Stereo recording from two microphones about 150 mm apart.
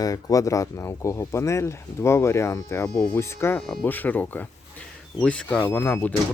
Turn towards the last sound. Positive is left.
turn(degrees=15)  # may be behind; listen again after turning